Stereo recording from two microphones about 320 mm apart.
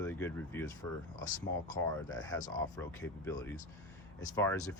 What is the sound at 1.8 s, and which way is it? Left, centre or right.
Speech, left.